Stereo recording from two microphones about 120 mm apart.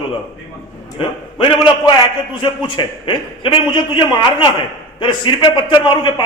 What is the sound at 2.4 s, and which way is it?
A man's voice, 40° left (ahead or behind).